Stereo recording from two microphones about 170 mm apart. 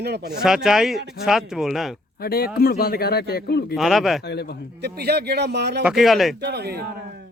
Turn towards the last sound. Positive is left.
turn(degrees=-70)  # may be behind; listen again after turning